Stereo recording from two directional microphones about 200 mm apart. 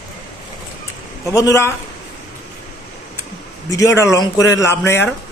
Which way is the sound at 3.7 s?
15° left (ahead or behind).